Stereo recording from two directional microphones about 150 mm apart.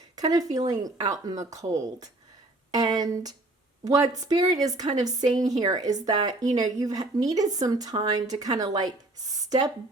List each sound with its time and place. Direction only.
0.2 s a woman's voice: 25° right (ahead or behind)